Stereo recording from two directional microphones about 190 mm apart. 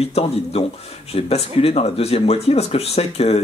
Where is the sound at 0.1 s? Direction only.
30° left (ahead or behind).